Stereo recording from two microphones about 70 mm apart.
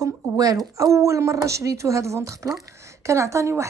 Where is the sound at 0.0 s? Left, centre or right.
Right.